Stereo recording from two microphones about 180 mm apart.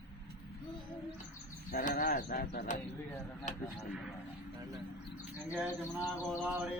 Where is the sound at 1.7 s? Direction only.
50° left (ahead or behind).